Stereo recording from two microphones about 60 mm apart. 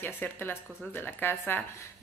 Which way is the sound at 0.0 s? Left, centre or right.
Left.